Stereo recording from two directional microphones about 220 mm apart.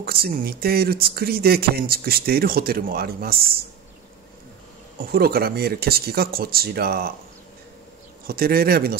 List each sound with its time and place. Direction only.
0.0 s speech: 45° right (ahead or behind)
4.9 s speech: 40° right (ahead or behind)
8.3 s speech: 45° right (ahead or behind)